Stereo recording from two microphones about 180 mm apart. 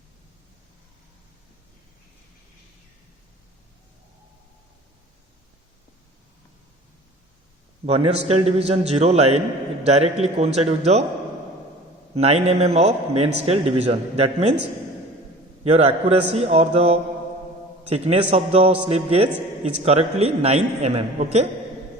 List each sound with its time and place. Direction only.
7.9 s a man's voice: 35° right (ahead or behind)
12.1 s a man's voice: 35° right (ahead or behind)
15.6 s a man's voice: 35° right (ahead or behind)